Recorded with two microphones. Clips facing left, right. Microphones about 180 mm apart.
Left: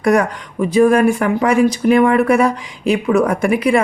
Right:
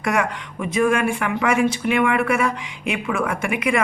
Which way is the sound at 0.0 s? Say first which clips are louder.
Left 8 dB; 35° left (ahead or behind).